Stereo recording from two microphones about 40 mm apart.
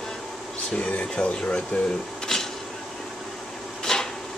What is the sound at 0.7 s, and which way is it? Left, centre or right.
Speech, left.